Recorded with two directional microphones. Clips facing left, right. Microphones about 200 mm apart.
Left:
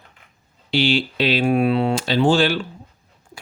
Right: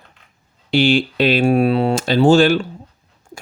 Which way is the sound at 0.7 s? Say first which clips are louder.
Right 4 dB; 50° right (ahead or behind).